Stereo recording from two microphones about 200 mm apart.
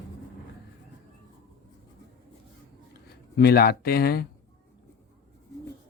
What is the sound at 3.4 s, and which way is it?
Speech, 50° left (ahead or behind).